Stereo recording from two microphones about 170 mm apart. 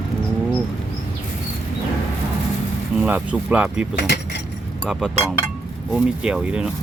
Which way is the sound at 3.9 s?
80° left.